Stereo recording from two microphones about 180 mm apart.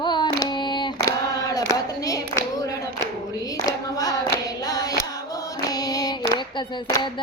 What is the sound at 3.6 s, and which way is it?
Clapping, 20° left (ahead or behind).